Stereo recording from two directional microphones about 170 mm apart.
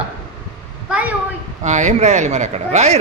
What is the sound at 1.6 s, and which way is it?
Speech, 45° right (ahead or behind).